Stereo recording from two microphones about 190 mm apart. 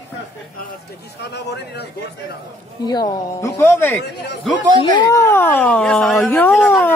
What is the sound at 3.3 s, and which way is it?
Speech, 10° left (ahead or behind).